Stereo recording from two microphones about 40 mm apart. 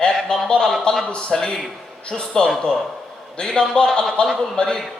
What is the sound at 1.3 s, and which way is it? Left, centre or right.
Speech, centre.